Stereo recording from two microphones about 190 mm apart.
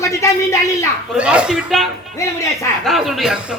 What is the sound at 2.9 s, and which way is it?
Speech, centre (ahead or behind).